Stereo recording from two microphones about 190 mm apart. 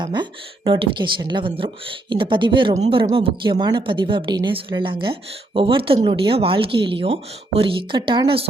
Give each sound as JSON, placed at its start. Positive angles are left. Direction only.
{"t": 0.0, "sound": "speech", "side_deg": -25}